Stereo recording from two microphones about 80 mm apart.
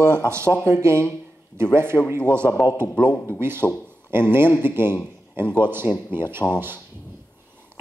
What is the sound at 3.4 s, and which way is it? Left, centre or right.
A man's voice, right.